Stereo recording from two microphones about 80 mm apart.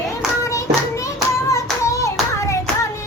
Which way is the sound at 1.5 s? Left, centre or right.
Left.